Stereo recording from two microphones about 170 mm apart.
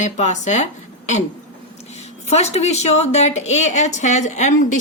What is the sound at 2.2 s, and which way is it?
A woman's voice, 40° left (ahead or behind).